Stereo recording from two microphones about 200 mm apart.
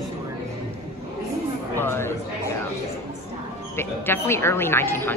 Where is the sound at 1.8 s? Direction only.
10° left (ahead or behind).